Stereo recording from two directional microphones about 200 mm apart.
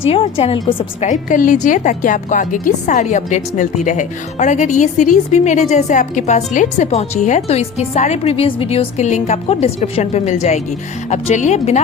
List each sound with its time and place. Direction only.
0.1 s a woman's voice: 30° left (ahead or behind)